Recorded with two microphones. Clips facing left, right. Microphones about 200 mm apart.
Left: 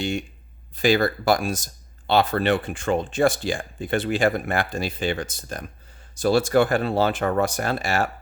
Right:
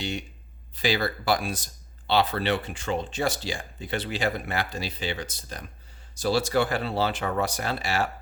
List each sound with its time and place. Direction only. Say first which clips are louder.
0.0 s speech: left 6 dB; 50° left (ahead or behind)